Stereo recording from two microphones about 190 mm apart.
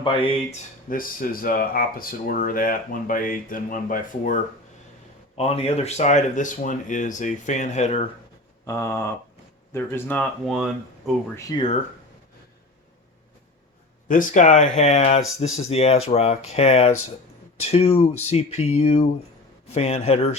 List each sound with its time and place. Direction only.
0.0 s speech: 25° left (ahead or behind)
0.9 s speech: 50° left (ahead or behind)
5.4 s speech: 30° left (ahead or behind)
8.6 s speech: 15° left (ahead or behind)
10.5 s speech: 5° right (ahead or behind)
11.3 s speech: 20° left (ahead or behind)
14.1 s speech: 45° left (ahead or behind)